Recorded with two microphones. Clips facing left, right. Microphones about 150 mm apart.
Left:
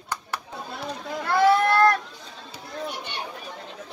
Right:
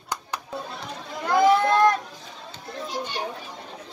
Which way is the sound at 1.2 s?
15° right (ahead or behind).